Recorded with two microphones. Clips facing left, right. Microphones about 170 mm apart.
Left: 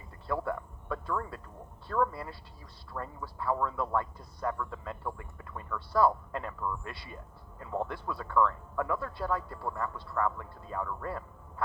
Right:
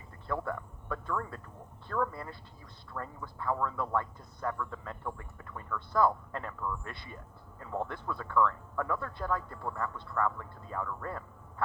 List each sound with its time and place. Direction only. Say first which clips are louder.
0.4 s a man's voice: left 2 dB; 30° left (ahead or behind)
6.3 s speech: left 2 dB; 25° left (ahead or behind)
7.6 s a man's voice: left 2 dB; 25° left (ahead or behind)